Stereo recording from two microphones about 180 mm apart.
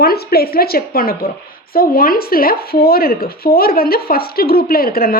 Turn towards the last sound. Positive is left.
turn(degrees=55)  # may be behind; listen again after turning